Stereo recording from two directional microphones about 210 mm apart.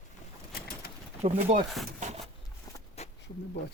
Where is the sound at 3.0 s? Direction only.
30° left (ahead or behind).